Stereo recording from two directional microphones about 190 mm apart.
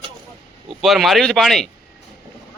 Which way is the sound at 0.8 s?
Centre (ahead or behind).